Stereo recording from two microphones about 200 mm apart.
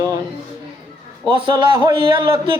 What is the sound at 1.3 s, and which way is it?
Speech, 25° right (ahead or behind).